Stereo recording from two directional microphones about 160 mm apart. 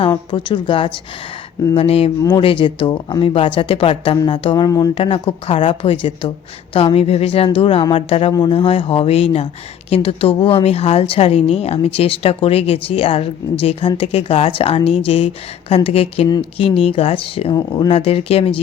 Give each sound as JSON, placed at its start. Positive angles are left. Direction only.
{"t": 0.0, "sound": "speech", "side_deg": 30}